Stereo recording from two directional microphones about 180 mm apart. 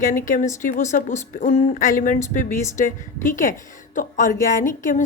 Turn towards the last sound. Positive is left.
turn(degrees=45)  # may be behind; listen again after turning